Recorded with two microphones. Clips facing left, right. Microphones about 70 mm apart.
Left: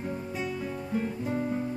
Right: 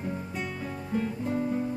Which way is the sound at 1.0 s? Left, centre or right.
Centre.